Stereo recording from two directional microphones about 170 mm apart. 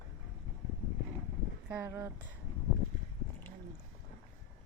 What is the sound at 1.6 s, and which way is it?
Speech, 10° right (ahead or behind).